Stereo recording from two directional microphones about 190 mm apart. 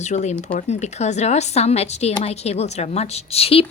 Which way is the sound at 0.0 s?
40° left (ahead or behind).